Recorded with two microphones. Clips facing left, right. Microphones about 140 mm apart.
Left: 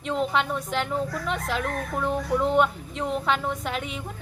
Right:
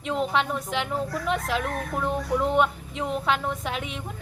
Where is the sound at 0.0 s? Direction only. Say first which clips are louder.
Even; centre (ahead or behind).